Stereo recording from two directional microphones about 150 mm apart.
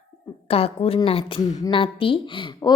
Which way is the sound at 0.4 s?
40° left (ahead or behind).